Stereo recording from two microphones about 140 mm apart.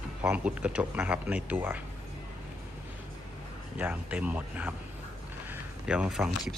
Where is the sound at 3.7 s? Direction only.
10° right (ahead or behind).